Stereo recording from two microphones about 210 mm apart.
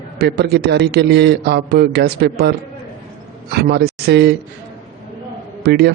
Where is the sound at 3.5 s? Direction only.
50° right (ahead or behind).